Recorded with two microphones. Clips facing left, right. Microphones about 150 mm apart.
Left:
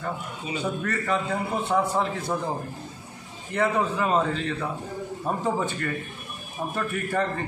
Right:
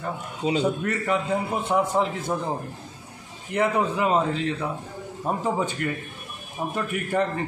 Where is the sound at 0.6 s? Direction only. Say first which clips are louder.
Even; 15° right (ahead or behind).